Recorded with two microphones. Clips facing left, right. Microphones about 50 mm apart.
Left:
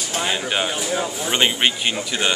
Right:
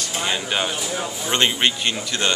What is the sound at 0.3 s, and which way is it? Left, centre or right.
Speech, centre.